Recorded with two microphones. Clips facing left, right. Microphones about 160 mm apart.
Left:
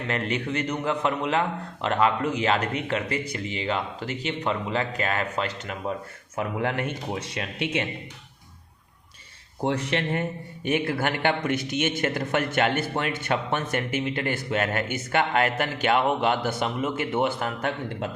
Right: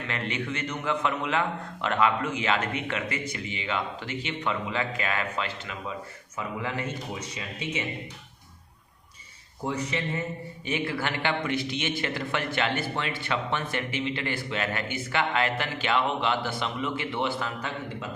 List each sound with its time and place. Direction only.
0.1 s a man's voice: 40° left (ahead or behind)
6.3 s speech: 60° left (ahead or behind)
9.6 s speech: 70° left (ahead or behind)
10.7 s a man's voice: 55° left (ahead or behind)